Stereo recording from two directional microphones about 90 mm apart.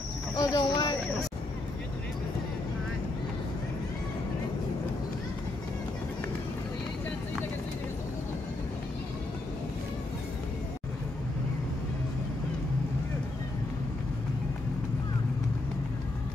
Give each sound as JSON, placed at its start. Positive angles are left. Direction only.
{"t": 0.4, "sound": "cricket", "side_deg": 45}